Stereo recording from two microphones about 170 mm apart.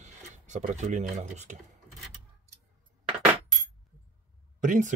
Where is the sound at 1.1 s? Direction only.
40° right (ahead or behind).